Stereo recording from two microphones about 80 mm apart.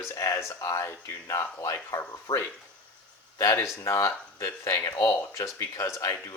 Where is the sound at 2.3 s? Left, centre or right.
Left.